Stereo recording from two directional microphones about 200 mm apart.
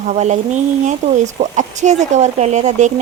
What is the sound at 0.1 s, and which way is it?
Speech, 35° right (ahead or behind).